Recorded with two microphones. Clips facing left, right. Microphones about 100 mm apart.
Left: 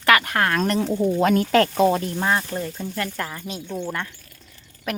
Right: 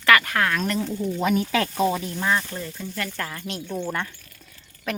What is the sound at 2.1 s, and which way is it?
Speech, 35° left (ahead or behind).